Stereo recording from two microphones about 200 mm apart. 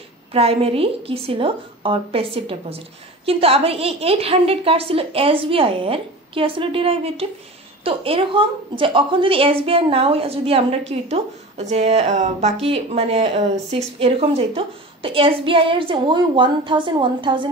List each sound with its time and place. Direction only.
0.3 s a woman's voice: 30° right (ahead or behind)